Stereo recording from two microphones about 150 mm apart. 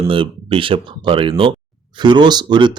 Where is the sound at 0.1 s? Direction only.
35° right (ahead or behind).